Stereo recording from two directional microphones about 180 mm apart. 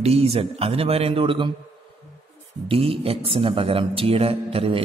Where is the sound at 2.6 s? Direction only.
30° right (ahead or behind).